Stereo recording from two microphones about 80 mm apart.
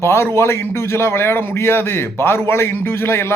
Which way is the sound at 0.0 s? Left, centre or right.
Left.